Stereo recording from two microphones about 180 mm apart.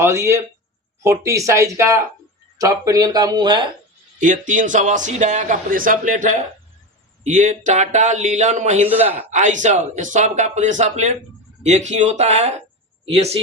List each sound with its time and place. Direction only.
0.0 s speech: 15° right (ahead or behind)
4.2 s speech: 45° right (ahead or behind)